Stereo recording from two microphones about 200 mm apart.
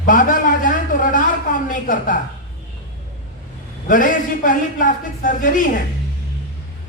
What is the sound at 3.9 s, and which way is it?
A man's voice, 40° left (ahead or behind).